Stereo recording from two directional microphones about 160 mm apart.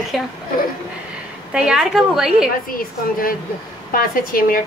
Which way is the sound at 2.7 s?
65° left (ahead or behind).